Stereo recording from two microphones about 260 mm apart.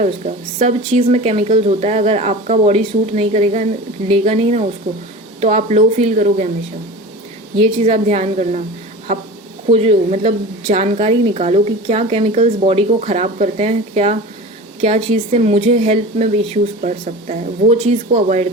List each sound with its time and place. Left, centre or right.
0.6 s a woman's voice: right
7.6 s a woman's voice: right
9.6 s a woman's voice: right